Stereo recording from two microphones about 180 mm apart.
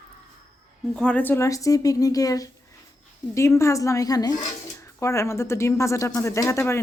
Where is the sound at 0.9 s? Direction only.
5° left (ahead or behind).